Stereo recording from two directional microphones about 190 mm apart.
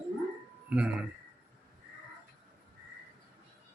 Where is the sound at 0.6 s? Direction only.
5° right (ahead or behind).